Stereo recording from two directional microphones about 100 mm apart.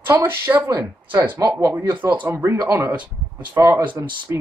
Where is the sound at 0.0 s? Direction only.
25° right (ahead or behind).